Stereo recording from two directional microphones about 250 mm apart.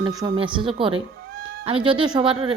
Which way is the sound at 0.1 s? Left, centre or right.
Centre.